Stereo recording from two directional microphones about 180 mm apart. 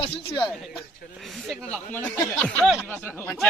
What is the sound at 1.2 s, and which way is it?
Speech, centre (ahead or behind).